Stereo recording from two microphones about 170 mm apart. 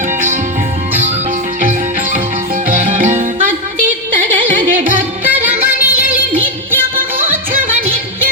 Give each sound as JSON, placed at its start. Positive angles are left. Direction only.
{"t": 3.0, "sound": "music", "side_deg": -45}
{"t": 4.9, "sound": "music", "side_deg": -10}
{"t": 6.9, "sound": "music", "side_deg": -55}